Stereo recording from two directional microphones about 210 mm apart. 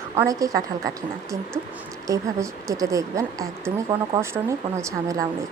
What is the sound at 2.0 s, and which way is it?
A woman's voice, 15° right (ahead or behind).